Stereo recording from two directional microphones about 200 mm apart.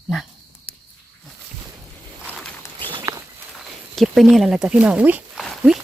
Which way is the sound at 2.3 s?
10° left (ahead or behind).